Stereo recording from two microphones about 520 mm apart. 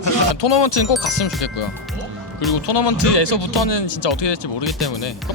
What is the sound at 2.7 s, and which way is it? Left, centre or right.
Speech, left.